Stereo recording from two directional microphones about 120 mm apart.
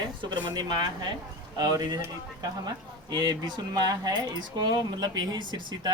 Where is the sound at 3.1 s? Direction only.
40° right (ahead or behind).